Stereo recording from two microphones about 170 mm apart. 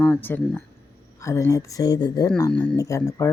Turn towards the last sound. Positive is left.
turn(degrees=15)  # may be behind; listen again after turning